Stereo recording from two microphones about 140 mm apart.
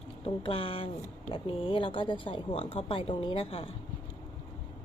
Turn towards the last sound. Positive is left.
turn(degrees=40)  # may be behind; listen again after turning